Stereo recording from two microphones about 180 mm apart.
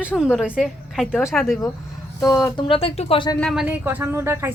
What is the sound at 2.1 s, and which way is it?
Speech, 20° left (ahead or behind).